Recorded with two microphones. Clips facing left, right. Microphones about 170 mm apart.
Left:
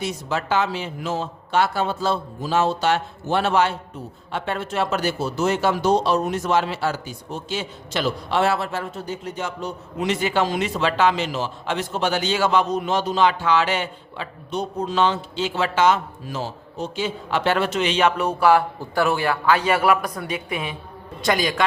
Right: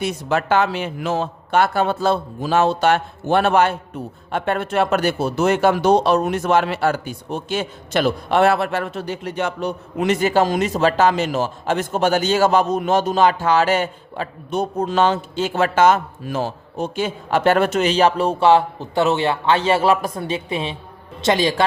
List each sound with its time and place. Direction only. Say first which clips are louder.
0.0 s a man's voice: right 5 dB; 60° right (ahead or behind); by 21.7 s 30° right (ahead or behind)